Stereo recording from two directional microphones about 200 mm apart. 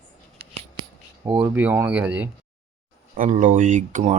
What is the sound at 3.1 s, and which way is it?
Speech, 40° right (ahead or behind).